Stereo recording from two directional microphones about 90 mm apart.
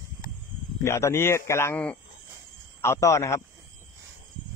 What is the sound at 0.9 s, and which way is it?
Speech, 30° left (ahead or behind).